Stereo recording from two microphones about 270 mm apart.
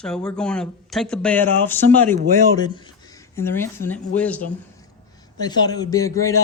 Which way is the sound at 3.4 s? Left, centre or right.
Centre.